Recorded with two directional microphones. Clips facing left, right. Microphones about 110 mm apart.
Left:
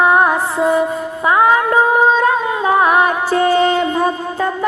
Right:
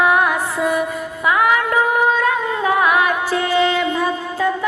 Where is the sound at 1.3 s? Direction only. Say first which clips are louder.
Left 4 dB; 30° left (ahead or behind).